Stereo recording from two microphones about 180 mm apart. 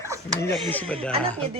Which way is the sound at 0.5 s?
10° left (ahead or behind).